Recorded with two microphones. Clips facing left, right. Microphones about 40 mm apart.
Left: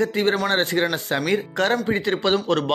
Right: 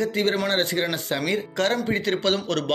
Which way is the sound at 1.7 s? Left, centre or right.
Centre.